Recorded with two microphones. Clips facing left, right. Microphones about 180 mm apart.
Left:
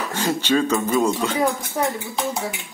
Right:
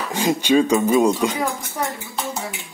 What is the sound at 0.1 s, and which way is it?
Speech, 15° right (ahead or behind).